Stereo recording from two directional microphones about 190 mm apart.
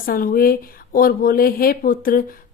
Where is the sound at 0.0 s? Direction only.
50° left (ahead or behind).